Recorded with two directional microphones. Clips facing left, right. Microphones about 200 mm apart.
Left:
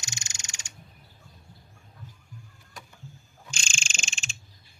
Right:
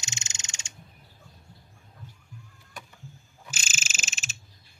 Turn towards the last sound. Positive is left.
turn(degrees=-5)  # may be behind; listen again after turning